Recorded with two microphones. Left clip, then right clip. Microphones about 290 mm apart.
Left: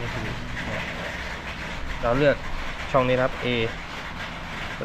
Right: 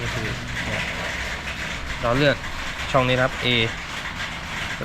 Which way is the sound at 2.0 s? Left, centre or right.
Centre.